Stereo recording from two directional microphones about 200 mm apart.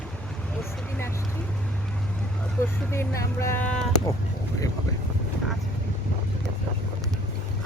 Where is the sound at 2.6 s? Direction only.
15° left (ahead or behind).